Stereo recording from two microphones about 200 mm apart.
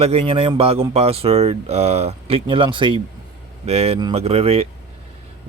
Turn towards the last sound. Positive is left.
turn(degrees=-30)  # may be behind; listen again after turning